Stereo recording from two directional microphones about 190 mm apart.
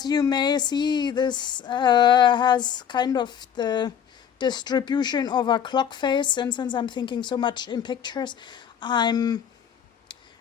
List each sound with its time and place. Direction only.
0.0 s speech: 20° left (ahead or behind)